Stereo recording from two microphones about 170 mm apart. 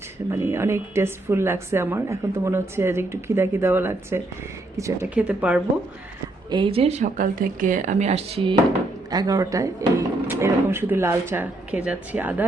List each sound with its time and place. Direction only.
0.3 s speech: 15° right (ahead or behind)
6.5 s a woman's voice: 30° right (ahead or behind)
7.2 s speech: 55° right (ahead or behind); by 8.5 s 35° right (ahead or behind)
9.0 s speech: 20° right (ahead or behind)